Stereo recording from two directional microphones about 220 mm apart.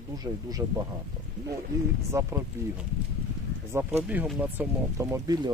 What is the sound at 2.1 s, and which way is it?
Speech, 10° right (ahead or behind).